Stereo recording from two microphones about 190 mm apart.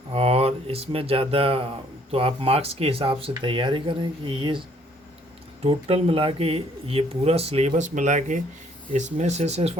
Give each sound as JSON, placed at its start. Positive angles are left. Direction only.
{"t": 0.1, "sound": "speech", "side_deg": -30}
{"t": 5.6, "sound": "speech", "side_deg": -30}